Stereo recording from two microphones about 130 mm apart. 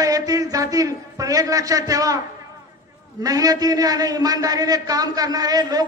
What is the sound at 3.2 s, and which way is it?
A man's voice, 30° right (ahead or behind).